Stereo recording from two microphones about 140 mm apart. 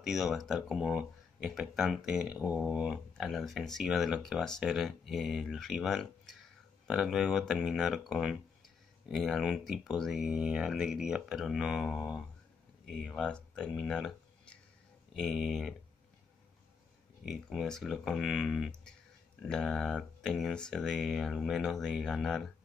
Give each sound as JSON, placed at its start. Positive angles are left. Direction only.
{"t": 0.0, "sound": "speech", "side_deg": 0}
{"t": 17.2, "sound": "speech", "side_deg": 0}